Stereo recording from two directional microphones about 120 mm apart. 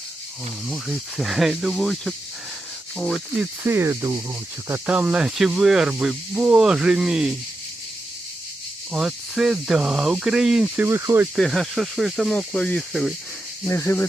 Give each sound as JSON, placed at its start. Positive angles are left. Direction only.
{"t": 0.7, "sound": "speech", "side_deg": -5}
{"t": 3.4, "sound": "speech", "side_deg": -20}
{"t": 4.7, "sound": "speech", "side_deg": -10}
{"t": 8.9, "sound": "speech", "side_deg": -5}
{"t": 10.8, "sound": "speech", "side_deg": -20}
{"t": 11.3, "sound": "speech", "side_deg": 5}
{"t": 13.7, "sound": "speech", "side_deg": 20}